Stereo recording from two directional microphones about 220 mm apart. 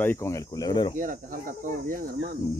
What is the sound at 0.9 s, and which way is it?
Speech, 40° right (ahead or behind).